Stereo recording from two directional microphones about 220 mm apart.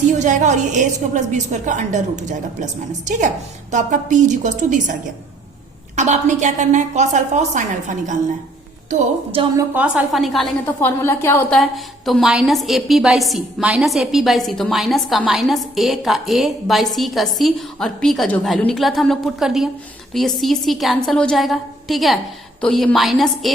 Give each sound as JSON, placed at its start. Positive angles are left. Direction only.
{"t": 0.2, "sound": "a woman's voice", "side_deg": -35}
{"t": 6.0, "sound": "a woman's voice", "side_deg": -35}
{"t": 9.6, "sound": "a woman's voice", "side_deg": -5}